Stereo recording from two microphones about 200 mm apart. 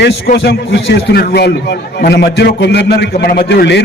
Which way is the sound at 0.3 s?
60° left (ahead or behind).